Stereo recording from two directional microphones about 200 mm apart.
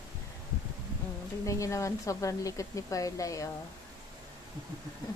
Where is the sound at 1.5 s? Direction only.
15° left (ahead or behind).